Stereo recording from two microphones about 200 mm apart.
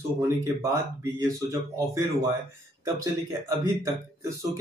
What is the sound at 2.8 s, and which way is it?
Speech, 15° right (ahead or behind).